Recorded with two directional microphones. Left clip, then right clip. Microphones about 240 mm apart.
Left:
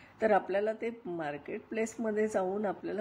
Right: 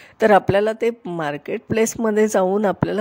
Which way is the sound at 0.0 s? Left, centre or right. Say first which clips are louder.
Right 13 dB; right.